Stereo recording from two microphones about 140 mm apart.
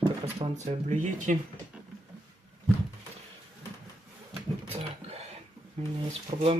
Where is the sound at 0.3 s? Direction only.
55° right (ahead or behind).